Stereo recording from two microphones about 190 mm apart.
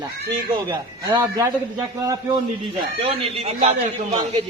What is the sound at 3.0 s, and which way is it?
Speech, 30° right (ahead or behind).